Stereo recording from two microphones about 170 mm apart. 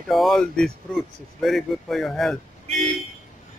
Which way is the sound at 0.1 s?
Centre (ahead or behind).